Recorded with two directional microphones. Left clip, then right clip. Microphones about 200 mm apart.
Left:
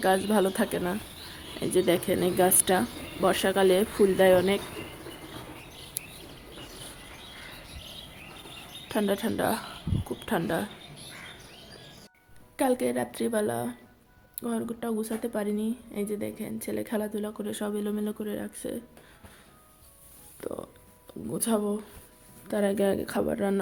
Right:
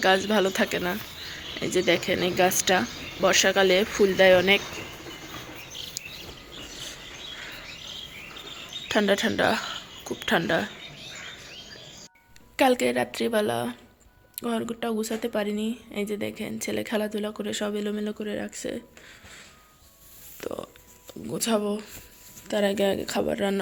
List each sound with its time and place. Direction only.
0.3 s speech: 10° left (ahead or behind)
6.0 s bird vocalization: 40° left (ahead or behind)
8.9 s speech: 5° right (ahead or behind)
9.6 s a sound: centre (ahead or behind)
12.5 s speech: centre (ahead or behind)
20.4 s speech: 5° left (ahead or behind)